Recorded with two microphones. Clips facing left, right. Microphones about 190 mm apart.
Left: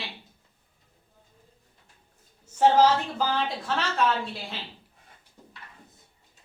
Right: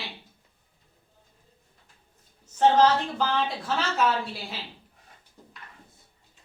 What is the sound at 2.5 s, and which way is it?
A woman's voice, 5° left (ahead or behind).